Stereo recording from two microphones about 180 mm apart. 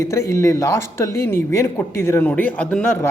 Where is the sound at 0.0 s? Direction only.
15° left (ahead or behind).